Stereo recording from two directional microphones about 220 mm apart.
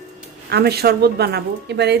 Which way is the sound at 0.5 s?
45° right (ahead or behind).